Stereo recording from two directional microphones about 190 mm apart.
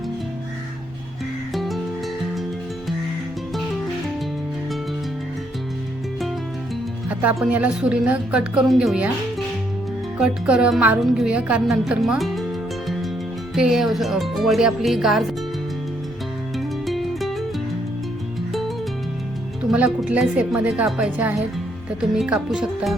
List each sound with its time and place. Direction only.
1.5 s music: centre (ahead or behind)
7.1 s speech: 5° right (ahead or behind)
10.2 s speech: 5° right (ahead or behind)
13.6 s speech: centre (ahead or behind)
16.6 s music: centre (ahead or behind)
19.7 s a woman's voice: 5° right (ahead or behind)